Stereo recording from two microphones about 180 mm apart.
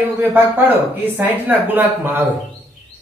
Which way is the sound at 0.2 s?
10° right (ahead or behind).